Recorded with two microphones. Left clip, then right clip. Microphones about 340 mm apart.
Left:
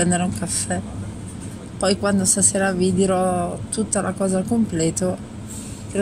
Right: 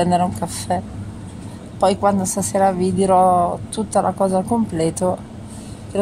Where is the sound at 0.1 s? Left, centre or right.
Right.